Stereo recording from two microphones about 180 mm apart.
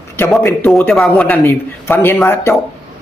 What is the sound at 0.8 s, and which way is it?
A man's voice, centre (ahead or behind).